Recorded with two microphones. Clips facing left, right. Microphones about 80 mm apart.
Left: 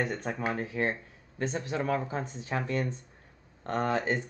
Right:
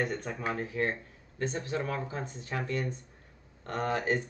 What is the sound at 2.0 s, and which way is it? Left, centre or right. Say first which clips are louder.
Speech: left 3 dB; left.